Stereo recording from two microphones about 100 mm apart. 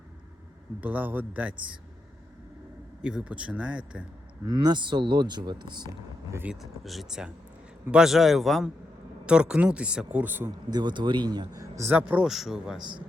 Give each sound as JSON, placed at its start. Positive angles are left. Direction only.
{"t": 0.8, "sound": "speech", "side_deg": -15}
{"t": 3.0, "sound": "speech", "side_deg": -10}
{"t": 4.4, "sound": "speech", "side_deg": -45}
{"t": 6.4, "sound": "speech", "side_deg": -5}
{"t": 10.7, "sound": "speech", "side_deg": -50}
{"t": 11.9, "sound": "speech", "side_deg": -15}
{"t": 12.3, "sound": "speech", "side_deg": -5}